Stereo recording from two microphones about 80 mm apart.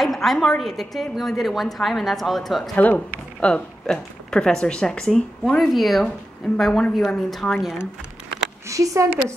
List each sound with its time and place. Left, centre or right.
0.0 s a woman's voice: centre
2.7 s a woman's voice: centre
8.6 s speech: right